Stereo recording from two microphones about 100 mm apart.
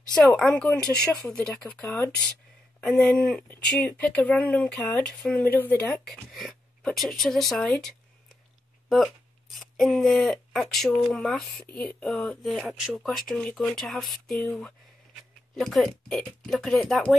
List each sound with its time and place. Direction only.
0.4 s speech: 10° left (ahead or behind)
6.0 s speech: centre (ahead or behind)
12.6 s speech: 5° right (ahead or behind)
15.5 s speech: 5° left (ahead or behind)